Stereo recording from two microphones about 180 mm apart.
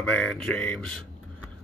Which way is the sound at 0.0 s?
5° left (ahead or behind).